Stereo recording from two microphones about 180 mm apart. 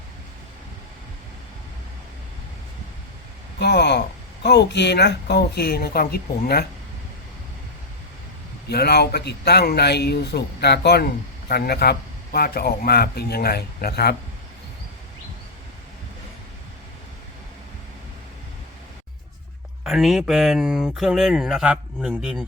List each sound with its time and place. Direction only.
3.6 s a man's voice: 70° left (ahead or behind)
8.7 s a man's voice: 65° left (ahead or behind)
19.8 s speech: centre (ahead or behind)